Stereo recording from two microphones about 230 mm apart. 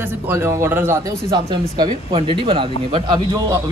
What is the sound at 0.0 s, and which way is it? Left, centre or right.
A man's voice, centre.